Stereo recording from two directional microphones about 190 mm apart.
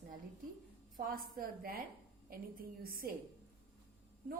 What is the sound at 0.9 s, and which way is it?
A woman's voice, 50° right (ahead or behind).